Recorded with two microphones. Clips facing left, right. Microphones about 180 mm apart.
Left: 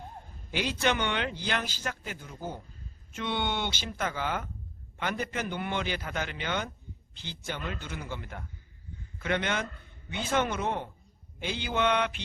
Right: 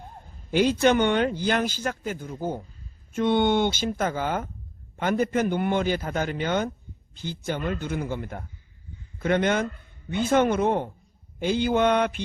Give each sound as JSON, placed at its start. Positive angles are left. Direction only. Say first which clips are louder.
{"t": 0.5, "sound": "speech", "louder": "right 9 dB", "side_deg": -45}